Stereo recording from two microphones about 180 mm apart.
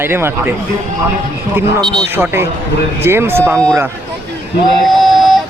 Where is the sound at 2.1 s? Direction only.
10° right (ahead or behind).